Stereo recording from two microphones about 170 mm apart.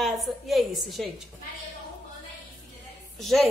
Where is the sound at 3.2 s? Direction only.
Centre (ahead or behind).